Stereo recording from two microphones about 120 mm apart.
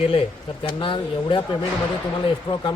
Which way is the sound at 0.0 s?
50° left (ahead or behind).